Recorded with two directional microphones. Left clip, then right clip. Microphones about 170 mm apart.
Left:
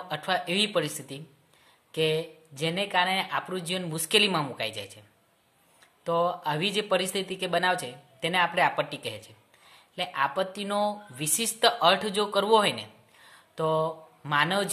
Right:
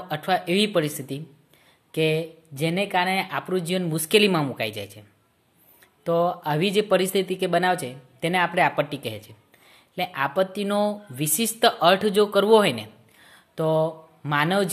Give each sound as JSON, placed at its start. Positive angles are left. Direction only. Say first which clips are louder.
{"t": 0.1, "sound": "speech", "louder": "right 5 dB", "side_deg": -30}
{"t": 6.0, "sound": "a man's voice", "louder": "right 4 dB", "side_deg": -30}